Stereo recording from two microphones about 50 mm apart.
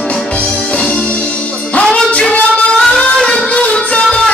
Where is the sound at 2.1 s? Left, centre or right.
Left.